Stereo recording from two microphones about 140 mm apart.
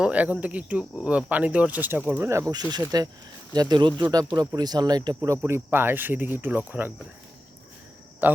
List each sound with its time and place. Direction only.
0.0 s speech: 10° right (ahead or behind)
2.5 s speech: 30° right (ahead or behind)
5.4 s speech: 15° right (ahead or behind)
8.2 s speech: 15° right (ahead or behind)